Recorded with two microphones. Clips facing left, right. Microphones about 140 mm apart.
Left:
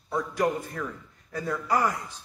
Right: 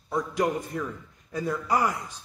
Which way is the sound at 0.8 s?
15° right (ahead or behind).